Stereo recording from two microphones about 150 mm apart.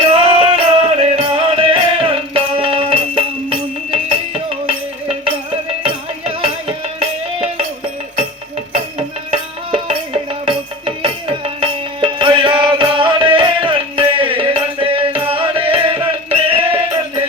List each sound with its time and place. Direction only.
0.1 s music: 35° right (ahead or behind)
9.3 s music: 40° right (ahead or behind)